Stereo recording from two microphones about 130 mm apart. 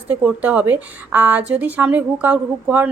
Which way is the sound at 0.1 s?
15° right (ahead or behind).